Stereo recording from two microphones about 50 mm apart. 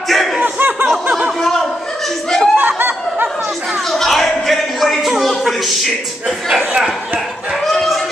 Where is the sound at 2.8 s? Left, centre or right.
Right.